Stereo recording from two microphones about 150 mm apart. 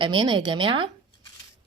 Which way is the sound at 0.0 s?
30° right (ahead or behind).